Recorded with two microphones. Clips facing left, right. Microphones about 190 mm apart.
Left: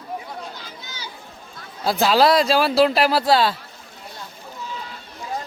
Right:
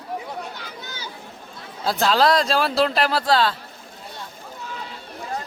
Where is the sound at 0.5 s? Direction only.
60° right (ahead or behind).